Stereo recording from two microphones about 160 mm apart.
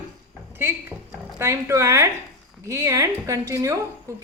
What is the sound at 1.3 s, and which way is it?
A woman's voice, 15° right (ahead or behind).